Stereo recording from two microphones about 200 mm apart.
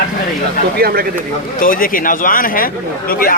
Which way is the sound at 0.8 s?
50° right (ahead or behind).